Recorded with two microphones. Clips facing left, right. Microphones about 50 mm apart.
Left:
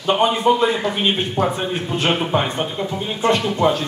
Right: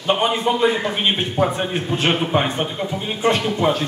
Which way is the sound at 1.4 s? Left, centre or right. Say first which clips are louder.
Even; centre.